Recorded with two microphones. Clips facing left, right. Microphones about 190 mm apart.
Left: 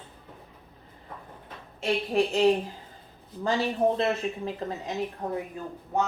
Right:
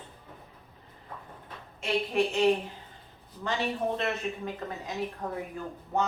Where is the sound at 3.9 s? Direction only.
30° left (ahead or behind).